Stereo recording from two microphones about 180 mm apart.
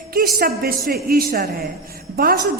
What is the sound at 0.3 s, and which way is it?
Speech, 55° right (ahead or behind).